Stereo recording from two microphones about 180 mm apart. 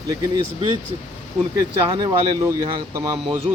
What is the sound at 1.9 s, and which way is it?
Speech, 25° right (ahead or behind).